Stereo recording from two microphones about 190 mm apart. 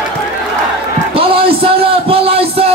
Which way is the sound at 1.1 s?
30° right (ahead or behind).